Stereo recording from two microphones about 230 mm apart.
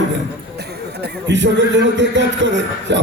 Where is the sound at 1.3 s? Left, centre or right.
Right.